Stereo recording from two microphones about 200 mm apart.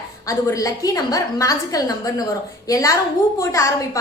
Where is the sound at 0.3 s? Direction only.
15° left (ahead or behind).